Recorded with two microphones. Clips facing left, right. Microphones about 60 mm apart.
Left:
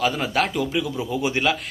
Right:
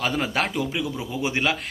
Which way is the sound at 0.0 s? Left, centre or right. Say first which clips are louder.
Left 2 dB; right.